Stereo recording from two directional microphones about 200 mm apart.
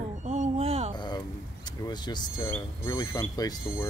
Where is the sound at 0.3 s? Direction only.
30° right (ahead or behind).